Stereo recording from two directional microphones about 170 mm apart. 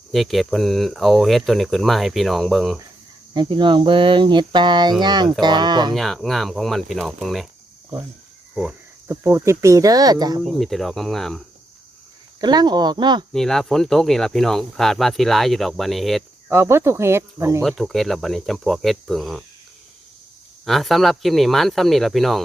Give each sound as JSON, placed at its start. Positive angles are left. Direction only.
{"t": 0.1, "sound": "speech", "side_deg": 0}
{"t": 3.3, "sound": "a sound", "side_deg": -30}
{"t": 5.9, "sound": "speech", "side_deg": 0}
{"t": 8.5, "sound": "speech", "side_deg": -10}
{"t": 10.4, "sound": "speech", "side_deg": 0}
{"t": 12.4, "sound": "a sound", "side_deg": -25}
{"t": 13.3, "sound": "speech", "side_deg": 0}
{"t": 16.5, "sound": "speech", "side_deg": -15}
{"t": 17.6, "sound": "speech", "side_deg": 0}
{"t": 20.7, "sound": "speech", "side_deg": 0}